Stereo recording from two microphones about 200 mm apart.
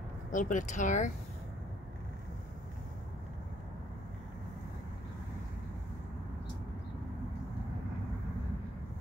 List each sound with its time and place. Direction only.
0.3 s speech: 40° left (ahead or behind)